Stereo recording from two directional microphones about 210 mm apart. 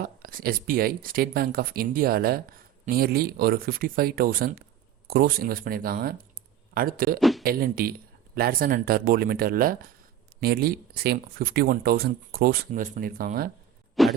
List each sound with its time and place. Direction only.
0.0 s speech: 45° right (ahead or behind)
7.2 s speech: centre (ahead or behind)
7.4 s speech: 45° right (ahead or behind)
14.0 s a sound: centre (ahead or behind)